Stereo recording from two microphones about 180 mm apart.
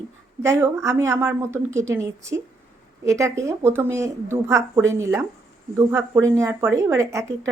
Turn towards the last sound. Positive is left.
turn(degrees=-15)  # may be behind; listen again after turning